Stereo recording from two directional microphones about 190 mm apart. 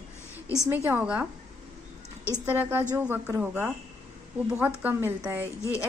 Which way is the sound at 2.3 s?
10° right (ahead or behind).